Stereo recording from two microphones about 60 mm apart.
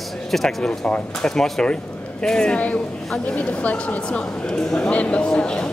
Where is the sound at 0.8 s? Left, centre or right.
Centre.